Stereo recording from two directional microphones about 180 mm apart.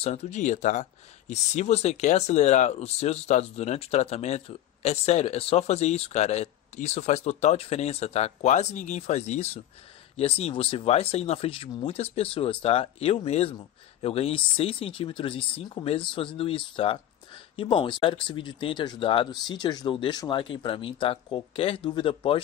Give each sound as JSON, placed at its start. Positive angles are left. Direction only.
{"t": 0.0, "sound": "speech", "side_deg": 35}